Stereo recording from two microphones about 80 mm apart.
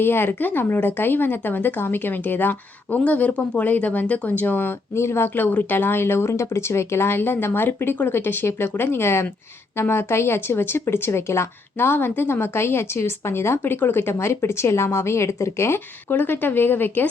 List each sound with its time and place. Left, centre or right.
0.0 s speech: left